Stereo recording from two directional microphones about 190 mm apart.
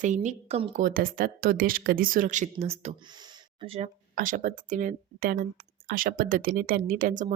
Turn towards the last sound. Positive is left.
turn(degrees=-45)  # may be behind; listen again after turning